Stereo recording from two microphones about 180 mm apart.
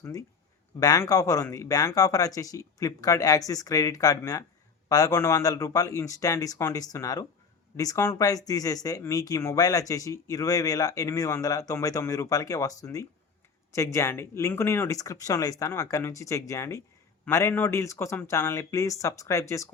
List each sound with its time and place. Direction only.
0.0 s speech: 20° left (ahead or behind)